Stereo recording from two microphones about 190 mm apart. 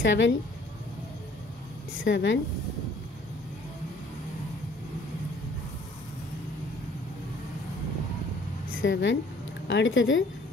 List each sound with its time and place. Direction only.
0.0 s a woman's voice: 70° left (ahead or behind)
2.0 s a woman's voice: 70° left (ahead or behind)
8.8 s a woman's voice: 70° left (ahead or behind); by 10.2 s 85° left